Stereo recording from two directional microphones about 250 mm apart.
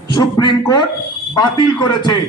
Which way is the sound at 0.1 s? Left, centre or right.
Centre.